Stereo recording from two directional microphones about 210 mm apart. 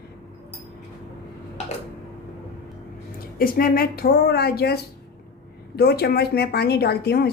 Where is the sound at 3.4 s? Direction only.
45° left (ahead or behind).